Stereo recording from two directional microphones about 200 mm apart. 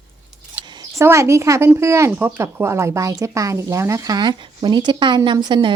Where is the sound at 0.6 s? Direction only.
20° right (ahead or behind).